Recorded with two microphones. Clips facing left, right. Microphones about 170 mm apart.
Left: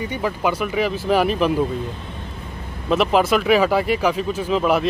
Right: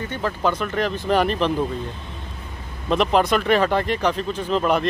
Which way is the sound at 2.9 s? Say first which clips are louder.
Left 1 dB; 5° left (ahead or behind).